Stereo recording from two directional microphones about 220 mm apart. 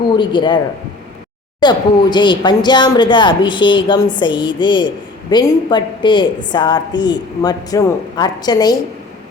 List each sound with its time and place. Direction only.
0.2 s a woman's voice: 20° left (ahead or behind)
1.6 s a woman's voice: 20° left (ahead or behind)